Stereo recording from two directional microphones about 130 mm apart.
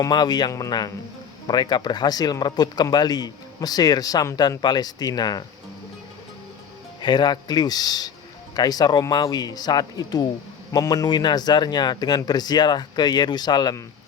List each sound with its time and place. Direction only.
0.0 s speech: 35° left (ahead or behind)
7.0 s speech: 35° left (ahead or behind)